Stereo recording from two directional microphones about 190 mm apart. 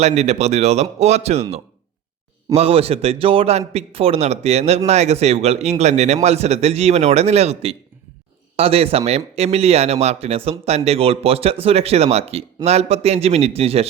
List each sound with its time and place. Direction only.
0.0 s a man's voice: 35° right (ahead or behind)